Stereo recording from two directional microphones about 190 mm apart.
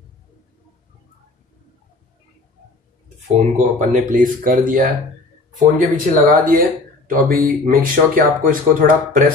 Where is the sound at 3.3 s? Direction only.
40° right (ahead or behind).